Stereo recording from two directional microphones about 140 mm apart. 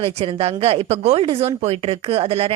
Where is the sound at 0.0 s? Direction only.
45° right (ahead or behind).